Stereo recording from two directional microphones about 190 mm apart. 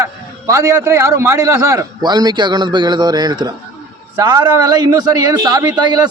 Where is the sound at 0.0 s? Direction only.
15° right (ahead or behind).